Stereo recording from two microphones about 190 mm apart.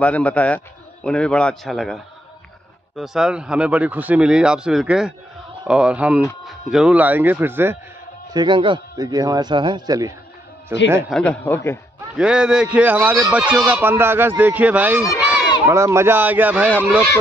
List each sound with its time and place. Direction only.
0.0 s speech: 5° left (ahead or behind)
3.0 s a man's voice: centre (ahead or behind)
8.3 s a man's voice: 25° right (ahead or behind)
11.1 s speech: 5° left (ahead or behind)
12.2 s a man's voice: 5° right (ahead or behind)
15.1 s a sound: 5° right (ahead or behind)
15.6 s a man's voice: 15° right (ahead or behind)